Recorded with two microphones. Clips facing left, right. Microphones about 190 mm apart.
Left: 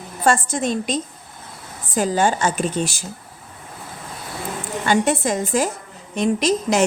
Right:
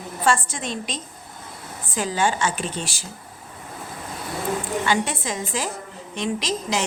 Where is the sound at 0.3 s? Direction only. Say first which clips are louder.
Left 4 dB; 45° left (ahead or behind).